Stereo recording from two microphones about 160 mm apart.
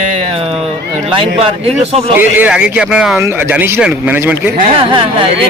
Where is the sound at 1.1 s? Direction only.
35° right (ahead or behind).